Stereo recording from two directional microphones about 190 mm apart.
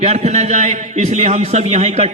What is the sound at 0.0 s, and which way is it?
A man's voice, 35° right (ahead or behind).